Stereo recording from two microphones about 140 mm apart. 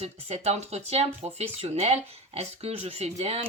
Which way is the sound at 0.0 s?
50° right (ahead or behind).